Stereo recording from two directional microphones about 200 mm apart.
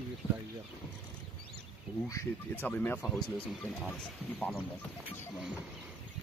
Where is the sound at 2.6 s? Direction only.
10° left (ahead or behind).